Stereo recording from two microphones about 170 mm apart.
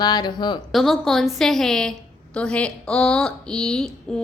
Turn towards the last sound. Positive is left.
turn(degrees=0)  # may be behind; listen again after turning